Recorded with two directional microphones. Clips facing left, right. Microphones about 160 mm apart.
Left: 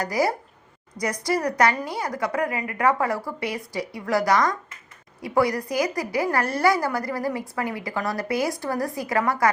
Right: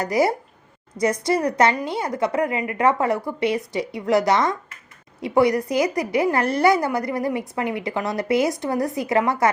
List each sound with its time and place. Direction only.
0.0 s a woman's voice: 25° right (ahead or behind)